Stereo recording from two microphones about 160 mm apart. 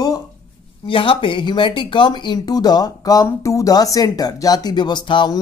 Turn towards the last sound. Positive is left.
turn(degrees=30)  # may be behind; listen again after turning